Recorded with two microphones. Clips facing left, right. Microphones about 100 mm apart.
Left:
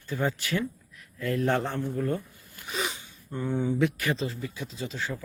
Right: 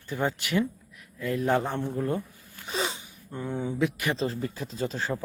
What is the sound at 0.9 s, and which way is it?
Speech, 5° right (ahead or behind).